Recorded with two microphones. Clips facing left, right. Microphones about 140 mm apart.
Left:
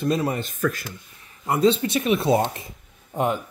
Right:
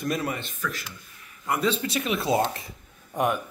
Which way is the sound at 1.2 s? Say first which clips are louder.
Left 7 dB; 25° left (ahead or behind).